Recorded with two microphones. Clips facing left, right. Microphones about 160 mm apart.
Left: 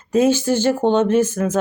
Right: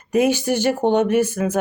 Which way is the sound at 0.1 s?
15° right (ahead or behind).